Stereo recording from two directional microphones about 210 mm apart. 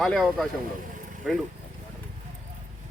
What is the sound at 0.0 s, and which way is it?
Speech, centre (ahead or behind).